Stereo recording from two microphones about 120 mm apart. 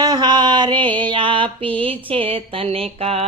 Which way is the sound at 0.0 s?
35° right (ahead or behind).